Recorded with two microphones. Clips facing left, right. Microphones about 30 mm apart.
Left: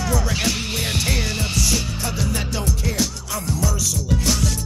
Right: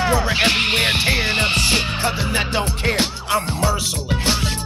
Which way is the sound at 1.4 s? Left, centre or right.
Right.